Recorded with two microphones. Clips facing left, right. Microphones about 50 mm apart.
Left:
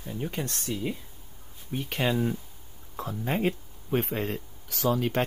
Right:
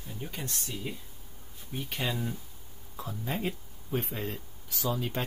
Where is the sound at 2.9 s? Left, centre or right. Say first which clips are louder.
Left 5 dB; left.